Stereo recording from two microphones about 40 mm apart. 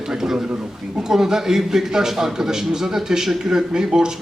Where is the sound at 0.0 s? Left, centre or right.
Centre.